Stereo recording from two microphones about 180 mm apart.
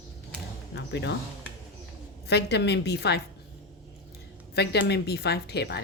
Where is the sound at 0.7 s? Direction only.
70° left (ahead or behind).